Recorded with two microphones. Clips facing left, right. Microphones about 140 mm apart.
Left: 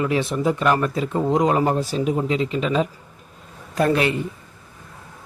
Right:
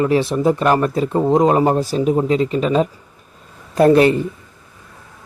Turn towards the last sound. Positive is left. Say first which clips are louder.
# right 8 dB
turn(degrees=-35)  # may be behind; listen again after turning